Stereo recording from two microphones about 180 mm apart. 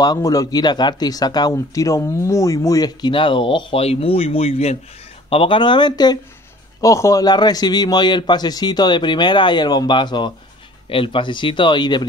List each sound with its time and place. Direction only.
0.0 s speech: 20° left (ahead or behind)